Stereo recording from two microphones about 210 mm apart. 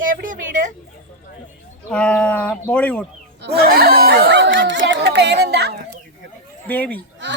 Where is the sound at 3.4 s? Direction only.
45° right (ahead or behind).